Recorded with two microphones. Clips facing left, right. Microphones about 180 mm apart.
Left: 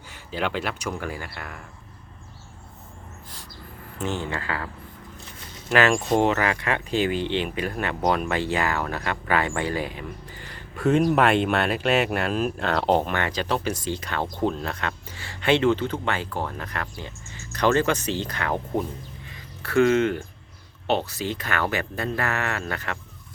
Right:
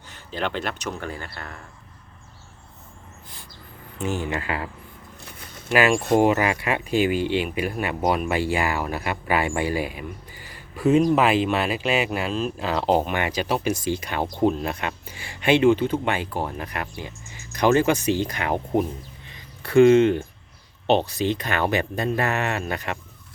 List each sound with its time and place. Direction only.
0.1 s speech: 10° left (ahead or behind)
4.0 s speech: 10° right (ahead or behind)
5.7 s speech: 5° right (ahead or behind)
12.5 s speech: 5° right (ahead or behind)
19.3 s a sound: 20° right (ahead or behind)
20.8 s speech: 20° right (ahead or behind)